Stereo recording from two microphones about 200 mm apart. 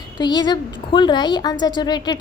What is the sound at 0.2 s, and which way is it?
A woman's voice, 20° left (ahead or behind).